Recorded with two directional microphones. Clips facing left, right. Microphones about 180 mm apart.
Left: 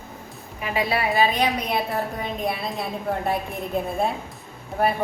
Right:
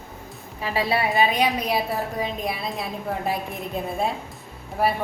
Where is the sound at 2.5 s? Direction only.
Centre (ahead or behind).